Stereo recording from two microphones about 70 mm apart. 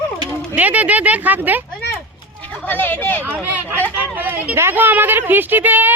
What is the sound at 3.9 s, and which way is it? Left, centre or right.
A woman's voice, right.